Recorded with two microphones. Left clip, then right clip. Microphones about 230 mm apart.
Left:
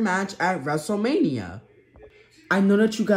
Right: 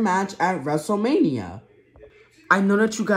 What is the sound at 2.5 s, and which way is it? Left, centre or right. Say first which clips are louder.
Speech: right 2 dB; right.